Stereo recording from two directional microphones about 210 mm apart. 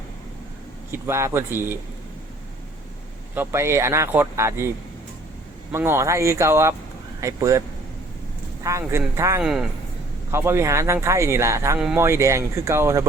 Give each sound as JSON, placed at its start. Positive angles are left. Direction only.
{"t": 0.9, "sound": "speech", "side_deg": -10}
{"t": 3.3, "sound": "speech", "side_deg": -10}
{"t": 5.7, "sound": "speech", "side_deg": -10}
{"t": 8.6, "sound": "speech", "side_deg": -15}
{"t": 9.4, "sound": "a man's voice", "side_deg": -5}